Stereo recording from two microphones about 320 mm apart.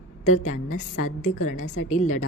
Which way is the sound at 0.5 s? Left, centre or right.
Left.